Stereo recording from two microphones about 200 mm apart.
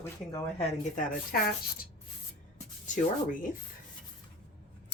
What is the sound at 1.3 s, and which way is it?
Speech, 45° left (ahead or behind).